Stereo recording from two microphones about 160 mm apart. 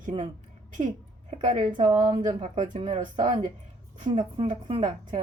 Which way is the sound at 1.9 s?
25° right (ahead or behind).